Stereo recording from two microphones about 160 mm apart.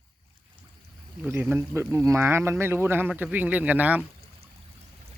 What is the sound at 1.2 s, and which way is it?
Speech, 10° right (ahead or behind).